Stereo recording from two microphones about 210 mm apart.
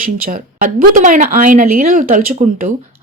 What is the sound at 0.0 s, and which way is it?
Speech, 40° right (ahead or behind).